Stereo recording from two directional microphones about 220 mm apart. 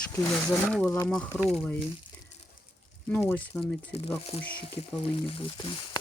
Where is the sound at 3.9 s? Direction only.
25° left (ahead or behind).